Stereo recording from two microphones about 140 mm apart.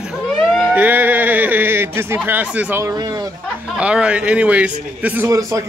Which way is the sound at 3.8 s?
10° right (ahead or behind).